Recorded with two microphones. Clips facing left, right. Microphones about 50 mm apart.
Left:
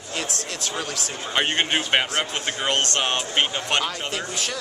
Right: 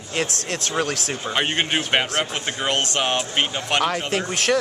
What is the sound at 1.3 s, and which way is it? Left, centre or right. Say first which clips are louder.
A man's voice: even; centre.